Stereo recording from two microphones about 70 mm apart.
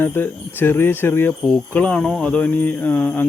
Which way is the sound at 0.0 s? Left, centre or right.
Left.